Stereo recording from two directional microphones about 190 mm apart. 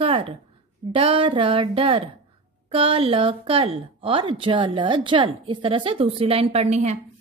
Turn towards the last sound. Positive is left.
turn(degrees=-35)  # may be behind; listen again after turning